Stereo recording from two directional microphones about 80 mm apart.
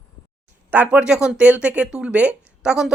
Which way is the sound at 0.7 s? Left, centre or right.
Centre.